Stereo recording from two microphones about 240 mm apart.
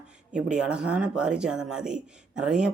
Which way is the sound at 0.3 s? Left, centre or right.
Centre.